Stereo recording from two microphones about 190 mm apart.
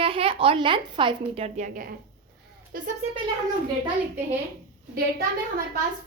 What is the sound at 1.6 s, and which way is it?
Speech, 45° right (ahead or behind).